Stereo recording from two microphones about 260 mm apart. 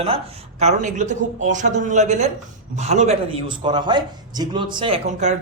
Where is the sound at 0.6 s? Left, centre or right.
Right.